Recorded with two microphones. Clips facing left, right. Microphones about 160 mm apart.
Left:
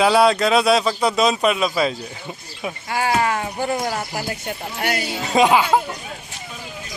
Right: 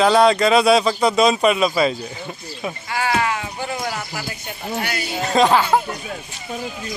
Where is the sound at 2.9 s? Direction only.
40° left (ahead or behind).